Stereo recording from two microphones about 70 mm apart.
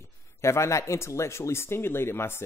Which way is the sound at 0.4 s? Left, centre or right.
Left.